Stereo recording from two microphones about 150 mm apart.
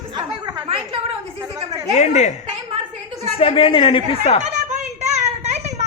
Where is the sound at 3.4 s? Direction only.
40° left (ahead or behind).